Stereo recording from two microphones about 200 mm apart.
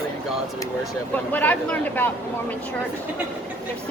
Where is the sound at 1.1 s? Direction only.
10° left (ahead or behind).